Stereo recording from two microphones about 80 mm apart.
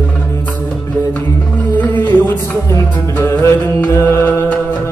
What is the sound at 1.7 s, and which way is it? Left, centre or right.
Music, left.